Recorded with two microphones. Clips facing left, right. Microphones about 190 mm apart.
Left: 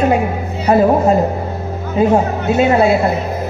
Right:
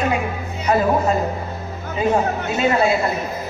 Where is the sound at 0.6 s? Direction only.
30° left (ahead or behind).